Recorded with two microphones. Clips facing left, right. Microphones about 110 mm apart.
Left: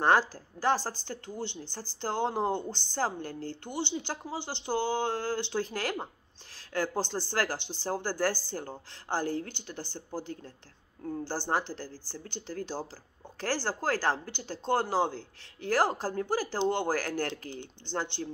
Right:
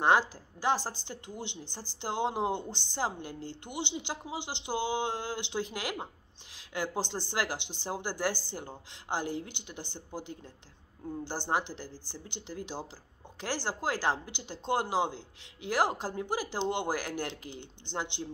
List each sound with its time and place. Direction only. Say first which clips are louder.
0.0 s speech: left 1 dB; 15° right (ahead or behind)